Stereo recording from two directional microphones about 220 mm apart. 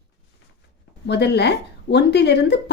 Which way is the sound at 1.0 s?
50° left (ahead or behind).